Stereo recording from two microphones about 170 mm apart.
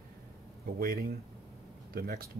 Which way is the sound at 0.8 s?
60° right (ahead or behind).